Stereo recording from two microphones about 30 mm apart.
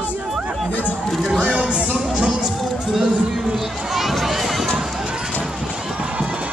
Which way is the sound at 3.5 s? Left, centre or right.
Centre.